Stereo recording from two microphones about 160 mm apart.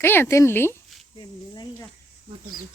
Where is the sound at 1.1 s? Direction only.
25° left (ahead or behind).